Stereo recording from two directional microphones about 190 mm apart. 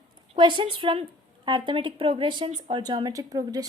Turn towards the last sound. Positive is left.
turn(degrees=-20)  # may be behind; listen again after turning